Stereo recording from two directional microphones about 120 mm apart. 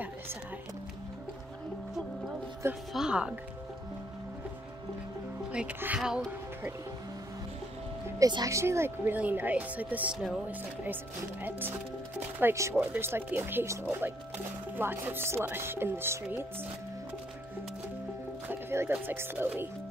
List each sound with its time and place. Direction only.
2.9 s speech: 5° right (ahead or behind)
5.5 s speech: 10° right (ahead or behind)
8.2 s speech: 30° right (ahead or behind); by 10.1 s 15° right (ahead or behind)
11.4 s speech: 15° right (ahead or behind)
14.8 s chopping: 15° right (ahead or behind)
18.5 s speech: 20° right (ahead or behind)